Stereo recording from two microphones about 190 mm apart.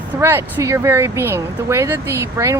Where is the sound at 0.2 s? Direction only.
15° right (ahead or behind).